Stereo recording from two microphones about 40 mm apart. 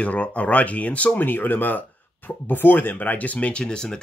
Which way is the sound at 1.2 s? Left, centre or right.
Left.